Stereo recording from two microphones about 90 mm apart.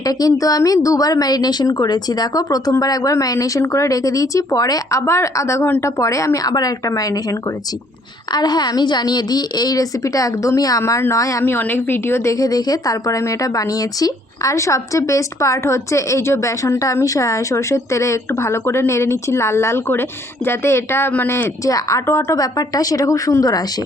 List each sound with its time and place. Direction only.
0.0 s a woman's voice: 45° left (ahead or behind)
11.4 s a woman's voice: 25° left (ahead or behind)
22.4 s a woman's voice: 45° left (ahead or behind)